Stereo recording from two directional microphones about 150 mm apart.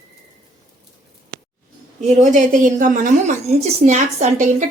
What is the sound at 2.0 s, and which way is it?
A woman's voice, 50° right (ahead or behind).